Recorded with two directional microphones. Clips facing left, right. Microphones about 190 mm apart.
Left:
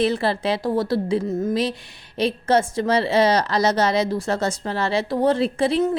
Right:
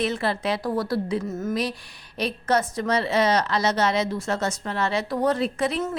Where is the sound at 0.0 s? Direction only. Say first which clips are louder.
Left 4 dB; 30° left (ahead or behind).